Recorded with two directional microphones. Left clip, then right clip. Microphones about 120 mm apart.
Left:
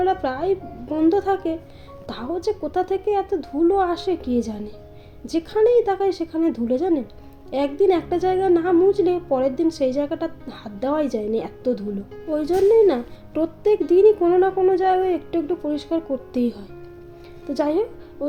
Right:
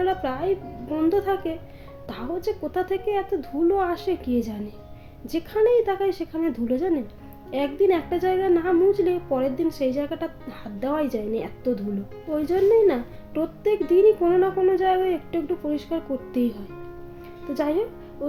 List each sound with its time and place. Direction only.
0.0 s a woman's voice: 35° left (ahead or behind)